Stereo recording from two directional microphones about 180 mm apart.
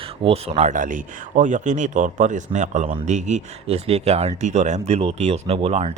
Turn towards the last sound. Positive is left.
turn(degrees=-35)  # may be behind; listen again after turning